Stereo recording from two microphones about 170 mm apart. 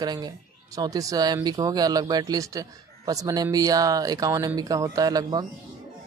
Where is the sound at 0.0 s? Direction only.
25° right (ahead or behind).